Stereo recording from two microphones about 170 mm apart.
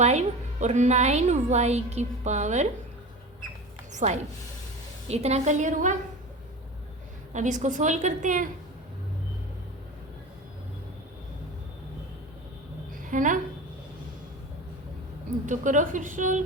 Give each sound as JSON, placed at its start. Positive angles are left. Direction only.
{"t": 0.0, "sound": "a woman's voice", "side_deg": -40}
{"t": 3.9, "sound": "a woman's voice", "side_deg": -45}
{"t": 7.3, "sound": "a woman's voice", "side_deg": -45}
{"t": 12.9, "sound": "a sound", "side_deg": -50}
{"t": 15.4, "sound": "a woman's voice", "side_deg": -50}